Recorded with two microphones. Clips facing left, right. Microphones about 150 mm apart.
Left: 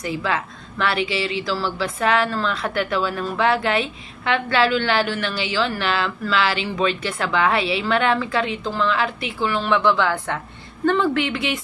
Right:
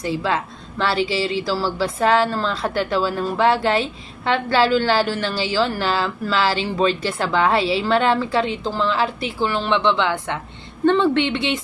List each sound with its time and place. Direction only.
0.0 s a woman's voice: 30° right (ahead or behind)